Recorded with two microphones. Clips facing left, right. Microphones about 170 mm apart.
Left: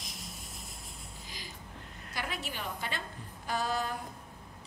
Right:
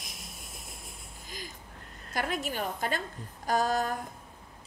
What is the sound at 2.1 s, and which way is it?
A woman's voice, 45° right (ahead or behind).